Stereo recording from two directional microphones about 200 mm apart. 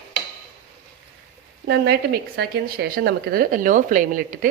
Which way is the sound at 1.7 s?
55° right (ahead or behind).